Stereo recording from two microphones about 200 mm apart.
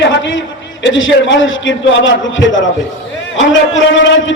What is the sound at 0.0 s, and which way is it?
A man's voice, 65° left (ahead or behind).